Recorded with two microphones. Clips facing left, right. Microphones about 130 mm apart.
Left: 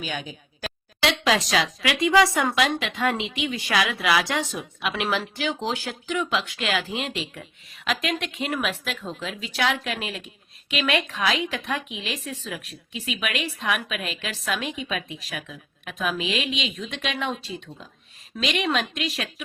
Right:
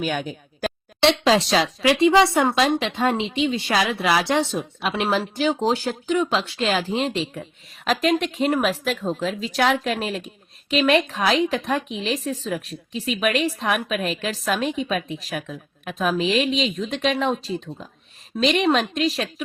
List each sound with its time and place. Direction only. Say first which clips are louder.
0.0 s speech: right 7 dB; 50° right (ahead or behind)
1.0 s speech: right 5 dB; 30° right (ahead or behind)